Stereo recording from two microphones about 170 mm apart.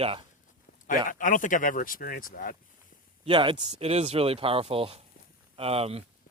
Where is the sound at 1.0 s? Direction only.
50° left (ahead or behind).